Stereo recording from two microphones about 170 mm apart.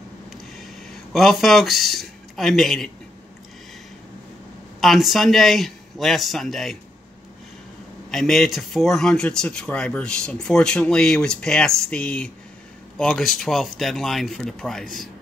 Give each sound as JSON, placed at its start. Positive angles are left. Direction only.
{"t": 1.1, "sound": "speech", "side_deg": 0}
{"t": 4.7, "sound": "speech", "side_deg": 0}
{"t": 8.1, "sound": "speech", "side_deg": 0}